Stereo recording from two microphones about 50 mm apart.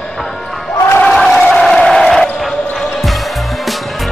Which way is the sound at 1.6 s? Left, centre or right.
Centre.